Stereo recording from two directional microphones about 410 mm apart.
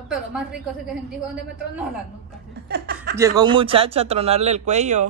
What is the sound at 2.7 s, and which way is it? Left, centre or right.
Chuckle, right.